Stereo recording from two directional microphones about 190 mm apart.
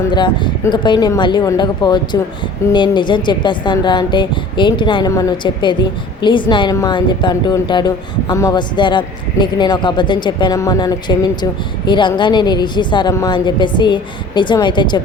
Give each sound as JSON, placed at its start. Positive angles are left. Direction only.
{"t": 0.1, "sound": "a woman's voice", "side_deg": 25}